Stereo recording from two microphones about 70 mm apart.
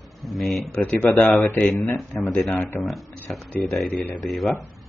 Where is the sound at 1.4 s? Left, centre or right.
Left.